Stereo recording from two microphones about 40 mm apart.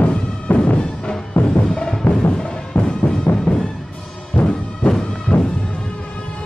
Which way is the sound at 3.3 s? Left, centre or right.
Left.